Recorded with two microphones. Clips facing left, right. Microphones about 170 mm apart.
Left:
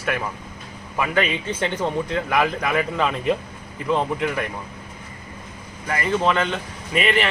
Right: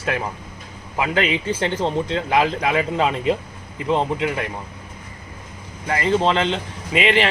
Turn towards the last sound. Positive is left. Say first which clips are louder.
# right 2 dB
turn(degrees=-30)  # may be behind; listen again after turning